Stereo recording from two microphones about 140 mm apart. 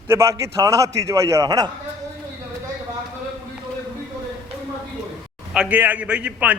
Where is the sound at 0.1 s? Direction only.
20° right (ahead or behind).